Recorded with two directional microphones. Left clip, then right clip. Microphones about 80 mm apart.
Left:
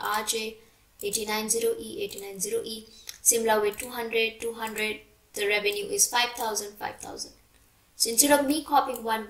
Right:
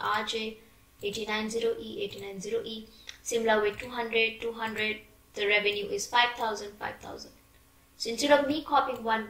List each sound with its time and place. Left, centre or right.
0.0 s a woman's voice: left